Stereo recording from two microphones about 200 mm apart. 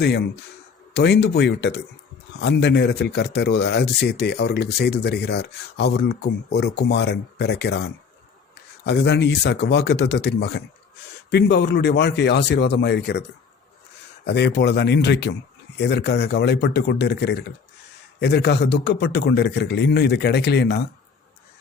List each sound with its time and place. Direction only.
0.0 s speech: 55° left (ahead or behind)
14.3 s speech: 55° left (ahead or behind)